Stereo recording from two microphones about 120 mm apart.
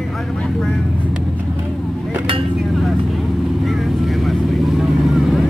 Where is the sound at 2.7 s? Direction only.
Centre (ahead or behind).